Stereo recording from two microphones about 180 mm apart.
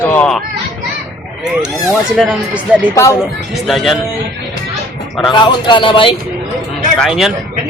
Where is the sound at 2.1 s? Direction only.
5° right (ahead or behind).